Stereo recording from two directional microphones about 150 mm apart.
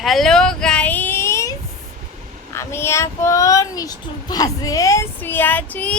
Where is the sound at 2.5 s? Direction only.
15° left (ahead or behind).